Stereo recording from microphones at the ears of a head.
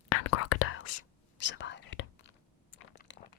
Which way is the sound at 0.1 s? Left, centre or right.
Left.